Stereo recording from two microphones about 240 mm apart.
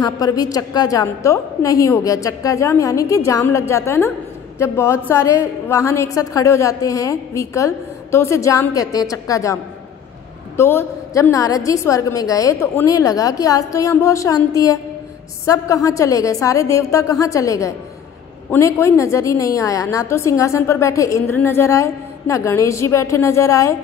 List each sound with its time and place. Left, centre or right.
0.0 s a woman's voice: centre